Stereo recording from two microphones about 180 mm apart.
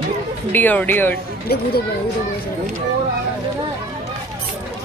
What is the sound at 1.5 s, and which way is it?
Speech, 60° left (ahead or behind).